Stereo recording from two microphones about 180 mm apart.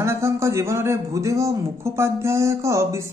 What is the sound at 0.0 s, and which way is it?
A man's voice, 15° right (ahead or behind).